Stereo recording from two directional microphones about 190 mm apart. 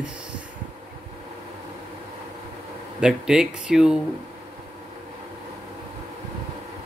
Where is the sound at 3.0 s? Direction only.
5° right (ahead or behind).